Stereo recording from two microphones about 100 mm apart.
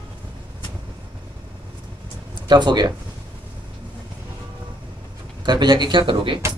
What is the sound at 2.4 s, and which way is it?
Speech, 50° right (ahead or behind).